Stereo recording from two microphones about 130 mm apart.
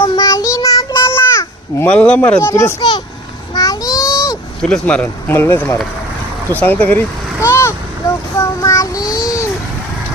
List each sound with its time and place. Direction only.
0.0 s child singing: 25° left (ahead or behind)
1.1 s a sound: 20° left (ahead or behind)
1.9 s speech: 10° left (ahead or behind)
2.4 s a child's voice: 20° left (ahead or behind)
2.7 s speech: 35° left (ahead or behind)
3.5 s a sound: 30° left (ahead or behind)
4.7 s speech: 10° left (ahead or behind)
7.4 s child singing: 20° left (ahead or behind)